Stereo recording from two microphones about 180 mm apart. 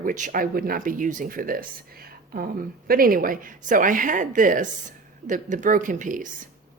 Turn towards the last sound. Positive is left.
turn(degrees=-45)  # may be behind; listen again after turning